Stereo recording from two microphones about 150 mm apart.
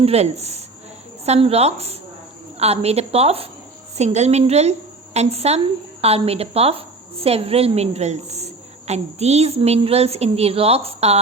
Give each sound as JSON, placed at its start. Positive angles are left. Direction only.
{"t": 0.0, "sound": "a woman's voice", "side_deg": -45}